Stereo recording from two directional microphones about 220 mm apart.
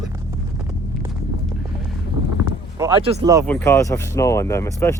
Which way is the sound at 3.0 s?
25° right (ahead or behind).